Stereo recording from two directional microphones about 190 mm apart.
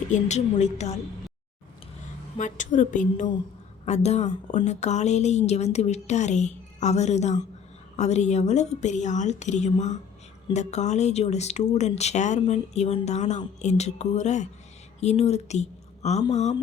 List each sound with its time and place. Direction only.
0.1 s speech: 40° left (ahead or behind)
2.4 s a woman's voice: 40° left (ahead or behind)